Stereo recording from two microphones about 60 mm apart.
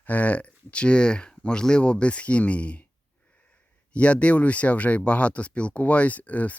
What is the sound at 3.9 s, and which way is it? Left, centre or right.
Speech, left.